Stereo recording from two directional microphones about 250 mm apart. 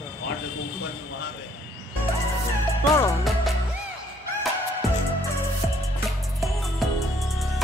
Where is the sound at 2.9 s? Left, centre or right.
Centre.